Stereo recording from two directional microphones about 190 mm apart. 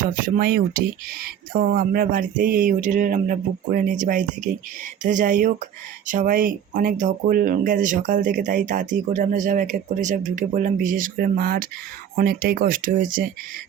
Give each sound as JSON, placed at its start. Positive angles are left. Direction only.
{"t": 0.0, "sound": "speech", "side_deg": -50}